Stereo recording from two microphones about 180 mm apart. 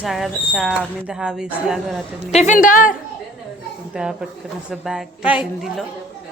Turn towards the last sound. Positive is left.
turn(degrees=-5)  # may be behind; listen again after turning